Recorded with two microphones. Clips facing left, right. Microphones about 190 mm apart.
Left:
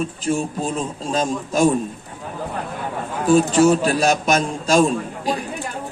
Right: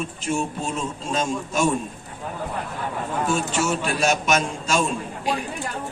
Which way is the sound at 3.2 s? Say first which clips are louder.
Left 11 dB; 35° left (ahead or behind).